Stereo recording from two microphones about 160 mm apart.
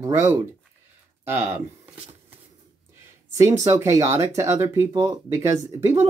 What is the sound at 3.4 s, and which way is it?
Speech, 20° right (ahead or behind).